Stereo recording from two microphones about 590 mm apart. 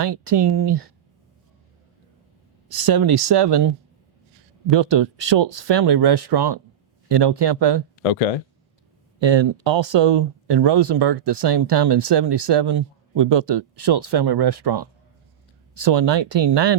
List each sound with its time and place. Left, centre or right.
0.0 s speech: right
2.6 s speech: right
4.7 s speech: right
8.0 s speech: left
9.2 s speech: right